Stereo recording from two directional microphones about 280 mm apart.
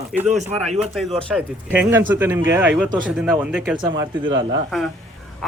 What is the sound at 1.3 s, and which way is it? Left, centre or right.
A man's voice, centre.